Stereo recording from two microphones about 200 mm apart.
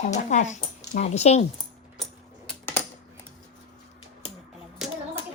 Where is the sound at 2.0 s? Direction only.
5° left (ahead or behind).